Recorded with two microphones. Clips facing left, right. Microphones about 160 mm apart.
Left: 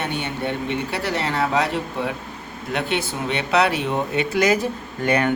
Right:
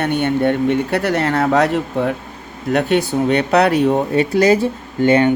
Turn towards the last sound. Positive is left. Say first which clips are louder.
# right 7 dB
turn(degrees=-25)  # may be behind; listen again after turning